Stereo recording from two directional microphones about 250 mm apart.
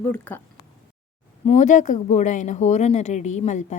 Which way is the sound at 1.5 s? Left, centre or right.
Left.